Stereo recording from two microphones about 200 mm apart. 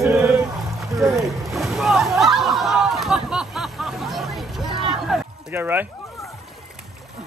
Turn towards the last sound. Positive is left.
turn(degrees=-10)  # may be behind; listen again after turning